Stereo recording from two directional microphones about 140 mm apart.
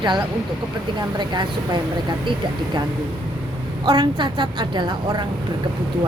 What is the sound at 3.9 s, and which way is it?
Speech, 35° right (ahead or behind).